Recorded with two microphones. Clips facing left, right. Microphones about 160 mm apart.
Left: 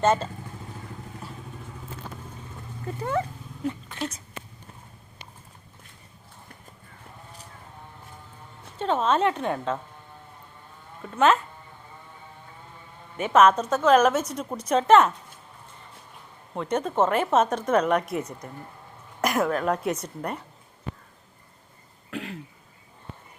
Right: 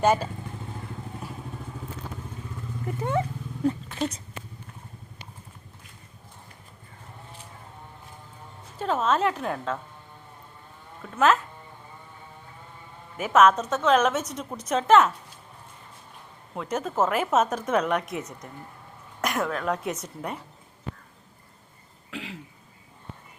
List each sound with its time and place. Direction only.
0.0 s speech: 10° right (ahead or behind)
2.8 s speech: 20° right (ahead or behind)
3.8 s speech: 5° right (ahead or behind)
8.8 s a woman's voice: 5° right (ahead or behind)
11.0 s a woman's voice: 5° left (ahead or behind)
13.1 s a woman's voice: 5° right (ahead or behind)
16.6 s a woman's voice: 5° right (ahead or behind)
22.1 s throat clearing: centre (ahead or behind)